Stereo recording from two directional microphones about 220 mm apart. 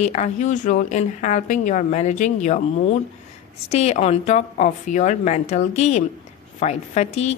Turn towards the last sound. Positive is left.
turn(degrees=30)  # may be behind; listen again after turning